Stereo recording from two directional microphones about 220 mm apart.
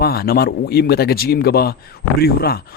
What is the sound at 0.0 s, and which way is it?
Speech, 45° left (ahead or behind).